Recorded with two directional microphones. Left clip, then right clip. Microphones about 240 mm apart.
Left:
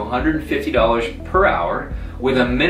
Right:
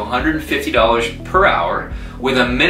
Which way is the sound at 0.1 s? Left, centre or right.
Centre.